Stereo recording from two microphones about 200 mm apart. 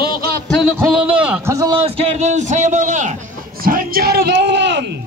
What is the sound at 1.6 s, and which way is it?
A man's voice, 25° right (ahead or behind).